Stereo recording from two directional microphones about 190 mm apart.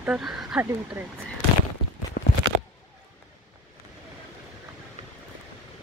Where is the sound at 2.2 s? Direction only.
50° left (ahead or behind).